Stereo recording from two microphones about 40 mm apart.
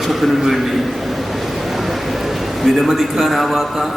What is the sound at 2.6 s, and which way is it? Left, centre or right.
A man's voice, centre.